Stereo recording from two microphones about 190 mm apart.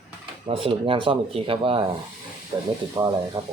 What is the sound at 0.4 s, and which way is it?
Speech, 30° right (ahead or behind).